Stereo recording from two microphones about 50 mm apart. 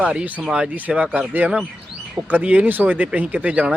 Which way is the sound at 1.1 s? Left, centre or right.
Right.